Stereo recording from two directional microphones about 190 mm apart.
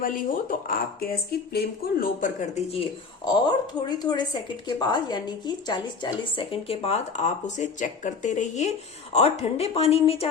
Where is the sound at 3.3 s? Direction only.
25° left (ahead or behind).